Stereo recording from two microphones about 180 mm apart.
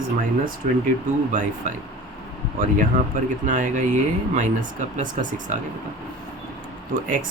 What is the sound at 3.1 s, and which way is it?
Speech, 45° right (ahead or behind).